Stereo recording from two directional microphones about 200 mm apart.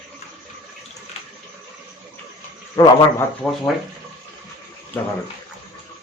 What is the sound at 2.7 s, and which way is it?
Speech, 15° left (ahead or behind).